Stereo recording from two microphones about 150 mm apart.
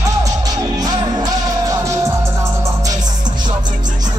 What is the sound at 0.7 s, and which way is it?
Music, 25° right (ahead or behind).